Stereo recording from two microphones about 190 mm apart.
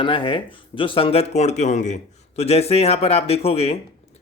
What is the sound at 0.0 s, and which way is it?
Speech, 25° left (ahead or behind).